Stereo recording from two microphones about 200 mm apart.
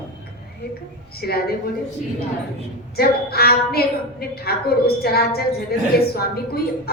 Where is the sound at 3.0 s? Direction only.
50° left (ahead or behind).